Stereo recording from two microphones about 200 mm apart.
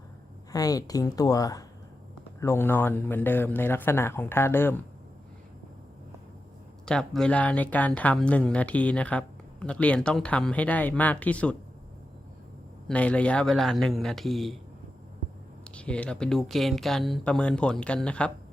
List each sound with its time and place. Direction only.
0.5 s speech: 20° left (ahead or behind)
6.8 s speech: 5° left (ahead or behind)
12.9 s speech: 5° left (ahead or behind)
15.6 s speech: 5° left (ahead or behind)